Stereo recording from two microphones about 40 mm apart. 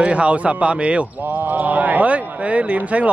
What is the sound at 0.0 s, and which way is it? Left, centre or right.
A man's voice, right.